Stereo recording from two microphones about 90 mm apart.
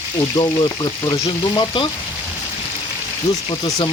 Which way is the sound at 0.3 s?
45° left (ahead or behind).